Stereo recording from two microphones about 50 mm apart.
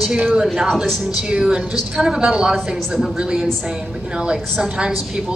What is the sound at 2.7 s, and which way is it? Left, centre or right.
Speech, centre.